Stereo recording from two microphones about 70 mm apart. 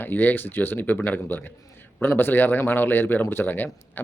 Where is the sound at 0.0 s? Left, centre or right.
Left.